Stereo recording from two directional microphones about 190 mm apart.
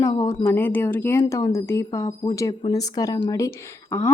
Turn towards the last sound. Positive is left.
turn(degrees=15)  # may be behind; listen again after turning